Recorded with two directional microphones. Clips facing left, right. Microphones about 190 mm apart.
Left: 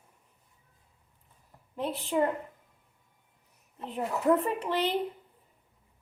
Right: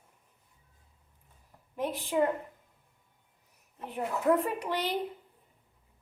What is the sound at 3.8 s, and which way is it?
Speech, 15° right (ahead or behind).